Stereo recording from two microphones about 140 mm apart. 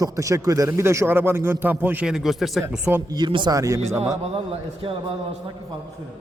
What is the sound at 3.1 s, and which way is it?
Speech, 30° right (ahead or behind).